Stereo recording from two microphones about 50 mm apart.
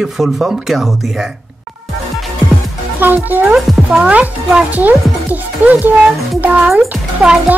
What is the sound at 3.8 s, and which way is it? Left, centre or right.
Speech, right.